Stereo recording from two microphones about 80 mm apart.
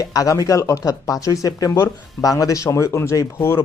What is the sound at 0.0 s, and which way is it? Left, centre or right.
Speech, left.